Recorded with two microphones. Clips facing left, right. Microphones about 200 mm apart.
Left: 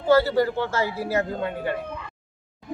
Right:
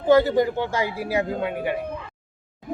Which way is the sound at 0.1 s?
15° right (ahead or behind).